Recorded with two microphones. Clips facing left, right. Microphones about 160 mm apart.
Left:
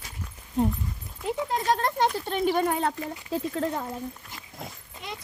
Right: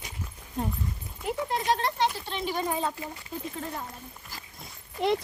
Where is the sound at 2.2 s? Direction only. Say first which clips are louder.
Left 6 dB; 50° left (ahead or behind); by 3.6 s 75° left (ahead or behind).